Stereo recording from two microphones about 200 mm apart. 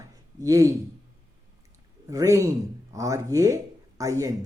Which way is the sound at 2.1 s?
15° right (ahead or behind).